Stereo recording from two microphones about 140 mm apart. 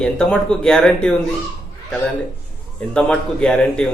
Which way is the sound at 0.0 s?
5° left (ahead or behind).